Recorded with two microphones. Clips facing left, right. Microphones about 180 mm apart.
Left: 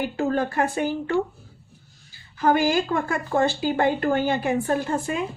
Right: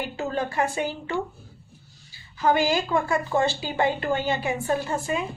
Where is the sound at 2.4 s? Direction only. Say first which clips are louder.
Left 2 dB; 50° left (ahead or behind).